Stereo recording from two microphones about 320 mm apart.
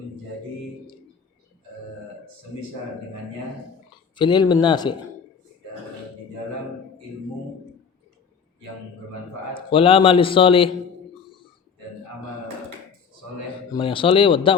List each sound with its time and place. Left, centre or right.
4.1 s a man's voice: centre
9.6 s a man's voice: centre
13.7 s a man's voice: centre